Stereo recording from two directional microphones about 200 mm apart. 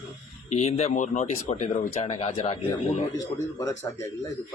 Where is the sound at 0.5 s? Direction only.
30° left (ahead or behind).